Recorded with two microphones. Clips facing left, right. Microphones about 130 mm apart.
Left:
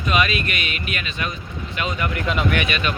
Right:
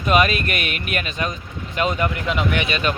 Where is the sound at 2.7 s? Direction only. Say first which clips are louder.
Right 2 dB; 40° right (ahead or behind).